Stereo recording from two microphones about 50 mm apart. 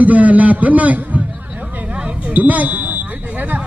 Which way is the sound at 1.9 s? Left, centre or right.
Centre.